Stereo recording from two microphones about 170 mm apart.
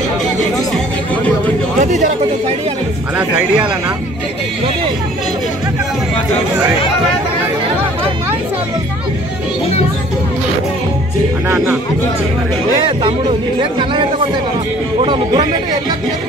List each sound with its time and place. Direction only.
1.8 s a man's voice: 45° right (ahead or behind)
3.2 s speech: 5° right (ahead or behind)
11.4 s speech: 10° right (ahead or behind)
13.6 s speech: 30° right (ahead or behind)